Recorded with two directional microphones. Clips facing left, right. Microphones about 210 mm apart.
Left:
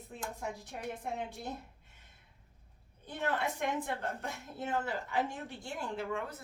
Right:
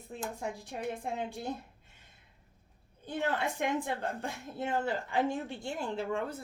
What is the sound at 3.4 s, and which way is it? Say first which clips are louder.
Speech: right 3 dB; 30° right (ahead or behind).